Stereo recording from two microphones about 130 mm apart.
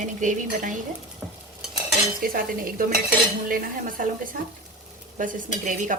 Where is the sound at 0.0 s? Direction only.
75° right (ahead or behind).